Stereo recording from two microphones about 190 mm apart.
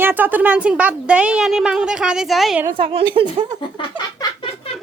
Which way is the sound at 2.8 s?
30° right (ahead or behind).